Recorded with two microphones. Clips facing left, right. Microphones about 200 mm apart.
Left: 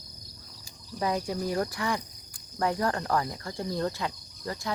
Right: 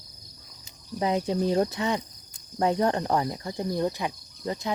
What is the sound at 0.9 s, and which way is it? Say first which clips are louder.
Speech: right 4 dB; 20° right (ahead or behind).